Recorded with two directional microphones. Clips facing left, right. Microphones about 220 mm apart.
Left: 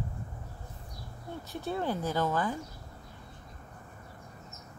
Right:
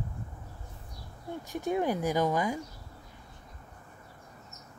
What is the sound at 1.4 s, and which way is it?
Speech, 15° right (ahead or behind).